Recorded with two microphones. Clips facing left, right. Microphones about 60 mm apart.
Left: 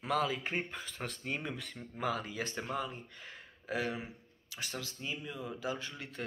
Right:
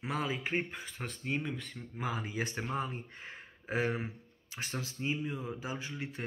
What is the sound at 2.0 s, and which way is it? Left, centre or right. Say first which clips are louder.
Speech: even; centre.